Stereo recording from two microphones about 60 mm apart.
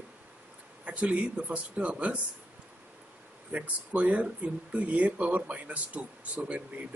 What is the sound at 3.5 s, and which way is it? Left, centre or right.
Speech, right.